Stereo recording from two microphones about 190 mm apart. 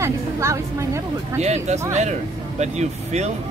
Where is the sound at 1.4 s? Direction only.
35° right (ahead or behind).